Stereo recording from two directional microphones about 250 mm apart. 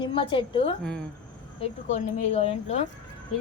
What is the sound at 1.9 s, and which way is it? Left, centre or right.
Speech, left.